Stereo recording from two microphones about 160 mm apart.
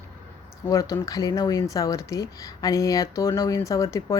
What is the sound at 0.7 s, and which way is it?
Speech, 20° left (ahead or behind).